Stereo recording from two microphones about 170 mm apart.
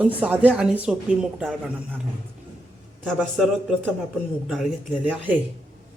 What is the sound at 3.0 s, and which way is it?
Speech, centre (ahead or behind).